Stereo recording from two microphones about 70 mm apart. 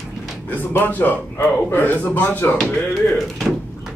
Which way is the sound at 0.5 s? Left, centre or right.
Left.